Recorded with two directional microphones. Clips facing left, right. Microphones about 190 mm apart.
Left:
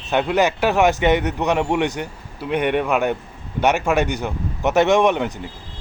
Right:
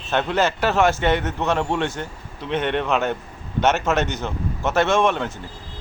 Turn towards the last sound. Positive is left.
turn(degrees=15)  # may be behind; listen again after turning